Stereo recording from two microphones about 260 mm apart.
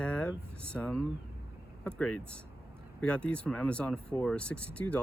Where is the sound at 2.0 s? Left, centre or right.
Centre.